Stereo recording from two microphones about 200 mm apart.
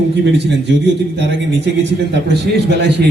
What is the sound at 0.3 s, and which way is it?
Speech, 60° right (ahead or behind).